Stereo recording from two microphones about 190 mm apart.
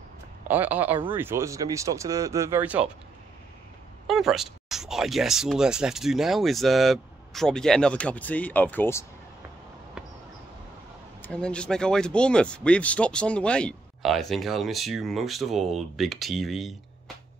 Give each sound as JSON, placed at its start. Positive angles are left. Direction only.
{"t": 0.5, "sound": "speech", "side_deg": -10}
{"t": 4.1, "sound": "speech", "side_deg": 0}
{"t": 11.2, "sound": "speech", "side_deg": 5}